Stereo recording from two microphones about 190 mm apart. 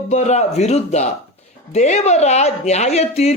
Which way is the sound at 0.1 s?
35° left (ahead or behind).